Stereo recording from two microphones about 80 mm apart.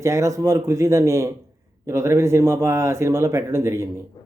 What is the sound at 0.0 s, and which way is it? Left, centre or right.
Speech, right.